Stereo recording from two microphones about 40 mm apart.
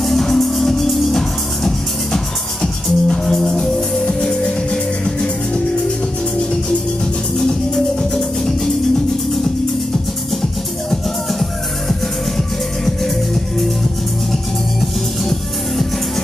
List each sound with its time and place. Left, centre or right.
0.0 s music: centre
7.3 s music: centre
10.9 s music: centre